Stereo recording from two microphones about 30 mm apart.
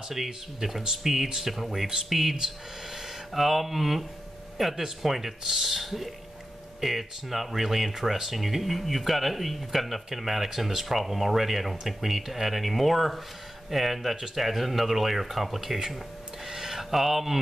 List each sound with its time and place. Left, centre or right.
0.1 s speech: centre
2.0 s speech: centre
16.4 s a sound: centre
16.9 s speech: centre